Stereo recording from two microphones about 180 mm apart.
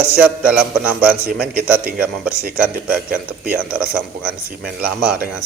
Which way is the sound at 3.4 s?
10° right (ahead or behind).